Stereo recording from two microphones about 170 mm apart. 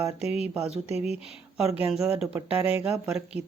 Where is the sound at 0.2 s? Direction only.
40° left (ahead or behind).